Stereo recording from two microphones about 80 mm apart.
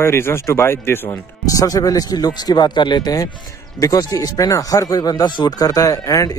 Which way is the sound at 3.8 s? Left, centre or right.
Left.